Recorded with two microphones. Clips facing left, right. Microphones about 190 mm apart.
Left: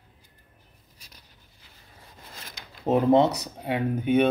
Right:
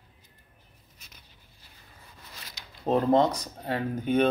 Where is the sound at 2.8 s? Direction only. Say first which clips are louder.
Left 3 dB; 15° left (ahead or behind).